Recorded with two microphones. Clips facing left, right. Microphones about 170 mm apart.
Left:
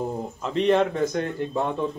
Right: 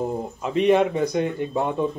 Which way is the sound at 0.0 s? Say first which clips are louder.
Right 2 dB; 10° right (ahead or behind).